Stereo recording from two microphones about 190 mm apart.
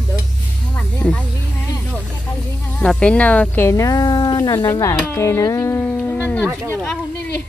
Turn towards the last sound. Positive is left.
turn(degrees=10)  # may be behind; listen again after turning